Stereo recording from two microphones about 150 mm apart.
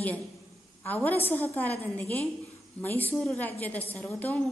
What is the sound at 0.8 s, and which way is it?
A woman's voice, 10° left (ahead or behind).